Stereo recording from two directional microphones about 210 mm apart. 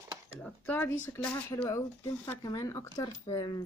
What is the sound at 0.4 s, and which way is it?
Speech, 10° left (ahead or behind).